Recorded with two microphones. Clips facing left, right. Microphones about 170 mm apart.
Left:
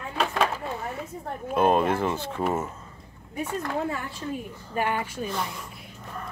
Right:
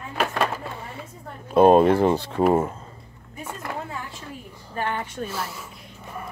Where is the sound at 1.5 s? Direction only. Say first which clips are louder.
Right 7 dB; 35° right (ahead or behind).